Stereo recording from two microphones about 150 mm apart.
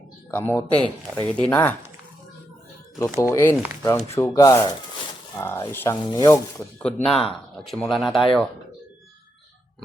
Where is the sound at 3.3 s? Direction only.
20° left (ahead or behind).